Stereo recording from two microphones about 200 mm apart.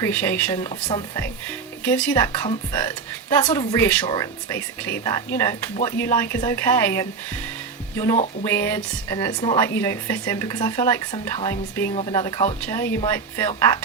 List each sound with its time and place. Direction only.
0.0 s speech: 10° left (ahead or behind)
1.8 s speech: 5° left (ahead or behind)
2.1 s a woman's voice: 20° left (ahead or behind)
8.1 s speech: 35° left (ahead or behind)
8.4 s speech: 10° left (ahead or behind)